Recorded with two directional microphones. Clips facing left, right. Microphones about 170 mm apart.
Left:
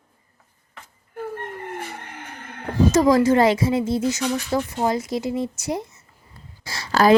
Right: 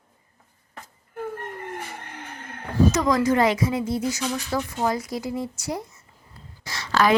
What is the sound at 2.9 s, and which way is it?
A woman's voice, 30° left (ahead or behind).